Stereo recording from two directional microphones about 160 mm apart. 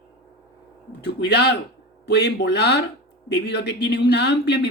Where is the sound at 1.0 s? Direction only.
90° left.